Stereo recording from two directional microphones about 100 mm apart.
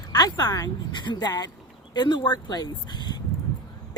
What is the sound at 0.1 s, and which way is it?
A woman's voice, 40° left (ahead or behind).